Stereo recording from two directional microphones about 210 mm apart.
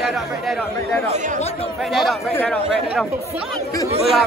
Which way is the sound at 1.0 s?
35° right (ahead or behind).